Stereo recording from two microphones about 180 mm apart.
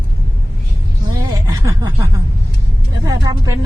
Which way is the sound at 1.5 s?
20° right (ahead or behind).